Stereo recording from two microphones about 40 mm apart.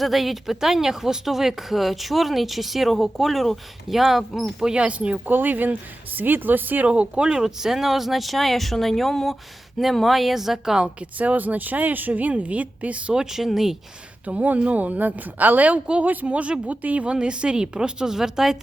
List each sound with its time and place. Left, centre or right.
0.0 s speech: centre
4.6 s a woman's voice: right
5.2 s a woman's voice: right
6.8 s speech: right
7.3 s speech: centre
11.2 s a woman's voice: right
13.1 s speech: centre
14.3 s a woman's voice: right
16.2 s speech: right
17.1 s a woman's voice: right